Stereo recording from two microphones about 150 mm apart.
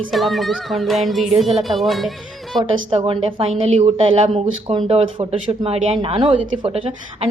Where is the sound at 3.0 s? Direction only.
40° right (ahead or behind).